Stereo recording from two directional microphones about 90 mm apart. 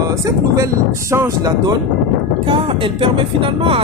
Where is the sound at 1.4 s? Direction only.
45° right (ahead or behind).